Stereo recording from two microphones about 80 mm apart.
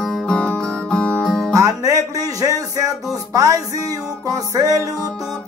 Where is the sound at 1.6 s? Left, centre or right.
Right.